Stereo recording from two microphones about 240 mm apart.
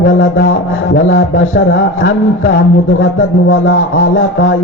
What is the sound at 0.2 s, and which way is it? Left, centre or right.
Speech, left.